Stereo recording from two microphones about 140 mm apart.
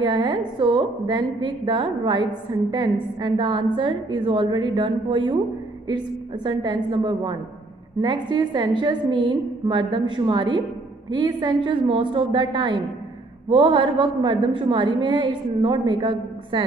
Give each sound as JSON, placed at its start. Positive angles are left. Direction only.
{"t": 0.0, "sound": "a woman's voice", "side_deg": -35}